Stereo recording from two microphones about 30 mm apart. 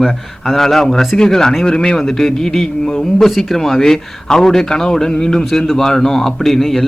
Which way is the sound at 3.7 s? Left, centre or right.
Centre.